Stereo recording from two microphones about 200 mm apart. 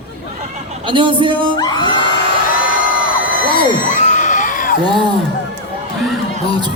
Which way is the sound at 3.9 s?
40° left (ahead or behind).